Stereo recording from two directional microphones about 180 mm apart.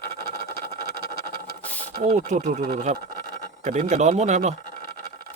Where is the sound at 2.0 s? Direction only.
40° right (ahead or behind).